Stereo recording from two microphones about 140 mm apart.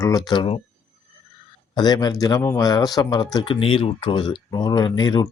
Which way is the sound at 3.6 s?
40° left (ahead or behind).